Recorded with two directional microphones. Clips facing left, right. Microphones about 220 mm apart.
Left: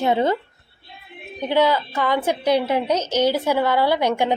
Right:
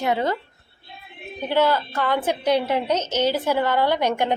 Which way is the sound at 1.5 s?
15° left (ahead or behind).